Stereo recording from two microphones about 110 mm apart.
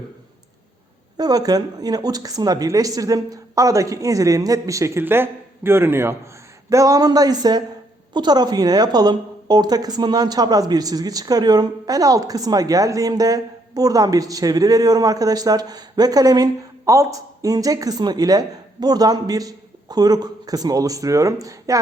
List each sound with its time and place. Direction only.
1.1 s a woman's voice: 35° right (ahead or behind)